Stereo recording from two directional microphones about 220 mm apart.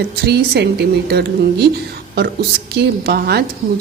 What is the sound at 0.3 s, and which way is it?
A woman's voice, 45° right (ahead or behind).